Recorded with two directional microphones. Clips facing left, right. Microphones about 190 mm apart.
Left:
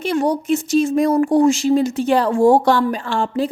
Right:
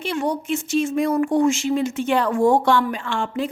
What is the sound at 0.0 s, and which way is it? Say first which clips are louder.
Speech: left 5 dB; 40° left (ahead or behind).